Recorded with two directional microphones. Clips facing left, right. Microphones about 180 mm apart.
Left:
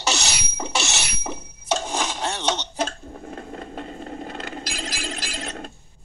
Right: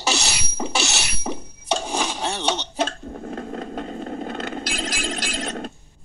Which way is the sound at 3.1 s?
55° right (ahead or behind).